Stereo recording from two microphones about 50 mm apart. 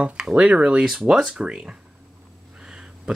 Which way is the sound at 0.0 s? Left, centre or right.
Right.